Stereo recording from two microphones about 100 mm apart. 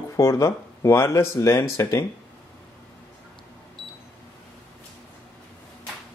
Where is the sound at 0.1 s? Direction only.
35° left (ahead or behind).